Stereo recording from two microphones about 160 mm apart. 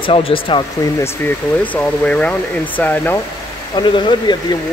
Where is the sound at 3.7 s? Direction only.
30° left (ahead or behind).